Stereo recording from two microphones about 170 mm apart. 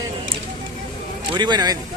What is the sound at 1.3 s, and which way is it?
Speech, 25° right (ahead or behind).